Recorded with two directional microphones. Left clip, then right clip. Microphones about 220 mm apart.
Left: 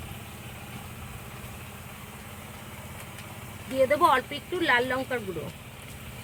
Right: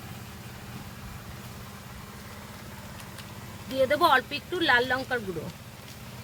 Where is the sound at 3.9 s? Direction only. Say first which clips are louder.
Right 1 dB; 15° right (ahead or behind).